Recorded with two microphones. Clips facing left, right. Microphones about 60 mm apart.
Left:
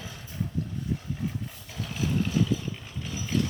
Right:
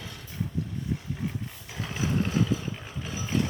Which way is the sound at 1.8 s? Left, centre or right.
Right.